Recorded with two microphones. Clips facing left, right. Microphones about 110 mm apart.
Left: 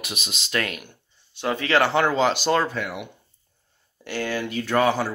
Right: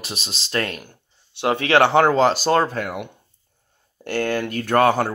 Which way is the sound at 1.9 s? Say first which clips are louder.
Right 5 dB; 45° right (ahead or behind).